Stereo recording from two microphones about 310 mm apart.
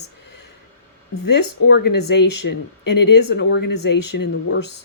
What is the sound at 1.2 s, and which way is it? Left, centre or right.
Speech, left.